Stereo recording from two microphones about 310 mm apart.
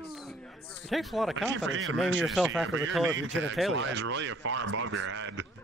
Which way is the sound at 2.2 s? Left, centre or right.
Centre.